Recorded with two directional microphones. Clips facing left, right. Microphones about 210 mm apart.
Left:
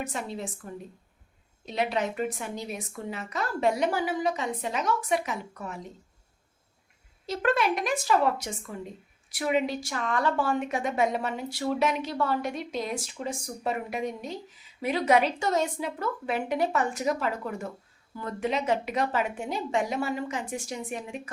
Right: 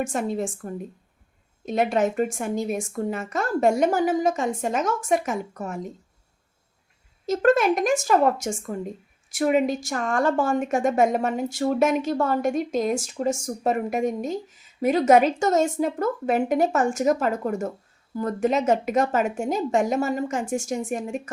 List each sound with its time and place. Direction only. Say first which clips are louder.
0.0 s speech: right 8 dB; 50° right (ahead or behind)
7.3 s speech: right 7 dB; 45° right (ahead or behind)